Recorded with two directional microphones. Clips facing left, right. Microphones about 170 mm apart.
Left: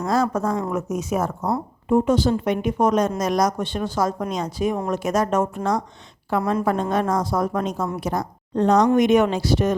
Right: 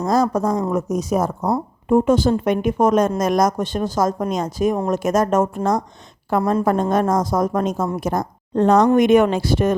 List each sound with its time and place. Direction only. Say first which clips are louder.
0.1 s speech: right 3 dB; 40° right (ahead or behind)
1.9 s speech: right 3 dB; 50° right (ahead or behind)